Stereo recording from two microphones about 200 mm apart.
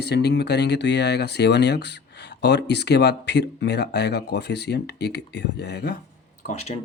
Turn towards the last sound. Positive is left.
turn(degrees=35)  # may be behind; listen again after turning